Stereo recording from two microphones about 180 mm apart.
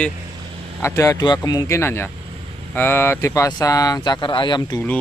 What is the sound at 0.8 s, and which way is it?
Speech, 15° left (ahead or behind).